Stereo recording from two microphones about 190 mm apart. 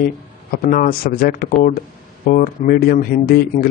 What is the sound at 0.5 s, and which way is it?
Speech, 50° left (ahead or behind).